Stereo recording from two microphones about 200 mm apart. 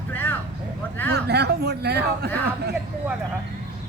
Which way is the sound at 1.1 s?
55° right (ahead or behind).